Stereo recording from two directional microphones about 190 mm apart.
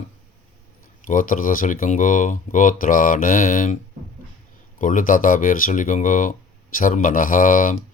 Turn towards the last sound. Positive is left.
turn(degrees=45)  # may be behind; listen again after turning